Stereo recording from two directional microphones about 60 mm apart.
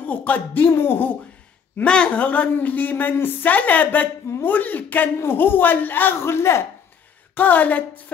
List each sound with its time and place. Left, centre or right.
0.0 s a woman's voice: left
0.7 s a man's voice: left
1.9 s a woman's voice: centre
6.2 s a man's voice: left
7.3 s a woman's voice: left